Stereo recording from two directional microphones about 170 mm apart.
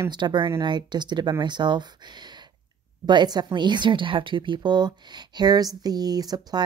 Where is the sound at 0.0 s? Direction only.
25° right (ahead or behind).